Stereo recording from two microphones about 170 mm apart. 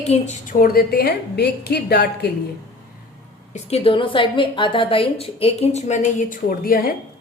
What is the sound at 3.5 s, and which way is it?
A woman's voice, 35° left (ahead or behind).